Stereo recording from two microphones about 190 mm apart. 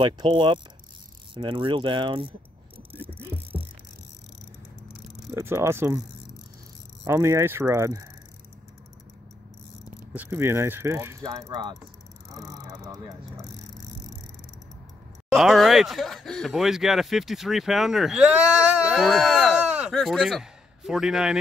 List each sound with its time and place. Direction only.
0.0 s speech: 25° right (ahead or behind)
3.0 s a sound: 10° right (ahead or behind)
5.3 s speech: 15° right (ahead or behind)
7.1 s speech: 15° right (ahead or behind)
10.1 s speech: 10° right (ahead or behind)
12.3 s vehicle: 15° right (ahead or behind)
15.3 s speech: centre (ahead or behind)